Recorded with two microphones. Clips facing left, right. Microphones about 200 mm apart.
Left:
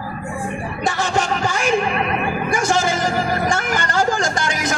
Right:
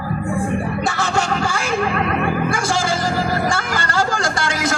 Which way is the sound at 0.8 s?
20° left (ahead or behind).